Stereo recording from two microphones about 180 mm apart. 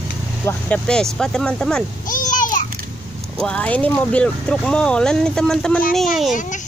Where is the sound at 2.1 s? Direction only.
45° left (ahead or behind).